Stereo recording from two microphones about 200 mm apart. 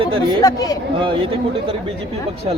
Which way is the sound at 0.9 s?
25° right (ahead or behind).